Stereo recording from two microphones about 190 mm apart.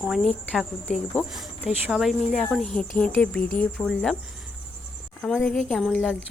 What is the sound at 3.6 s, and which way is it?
A woman's voice, 5° left (ahead or behind).